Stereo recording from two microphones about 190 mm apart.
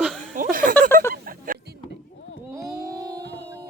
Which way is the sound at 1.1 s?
50° right (ahead or behind).